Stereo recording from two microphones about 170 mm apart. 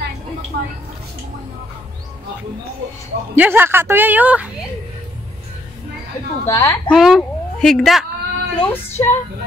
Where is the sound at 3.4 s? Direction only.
10° right (ahead or behind).